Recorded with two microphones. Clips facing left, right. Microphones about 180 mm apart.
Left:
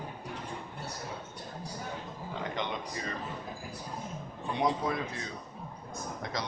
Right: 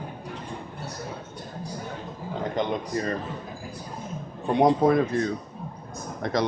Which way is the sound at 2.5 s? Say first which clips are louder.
Right 12 dB; 45° right (ahead or behind).